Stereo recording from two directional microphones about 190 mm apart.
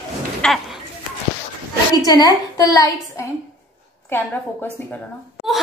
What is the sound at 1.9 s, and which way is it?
A woman's voice, 20° left (ahead or behind).